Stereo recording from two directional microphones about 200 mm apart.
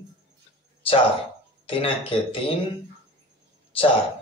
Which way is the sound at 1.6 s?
25° left (ahead or behind).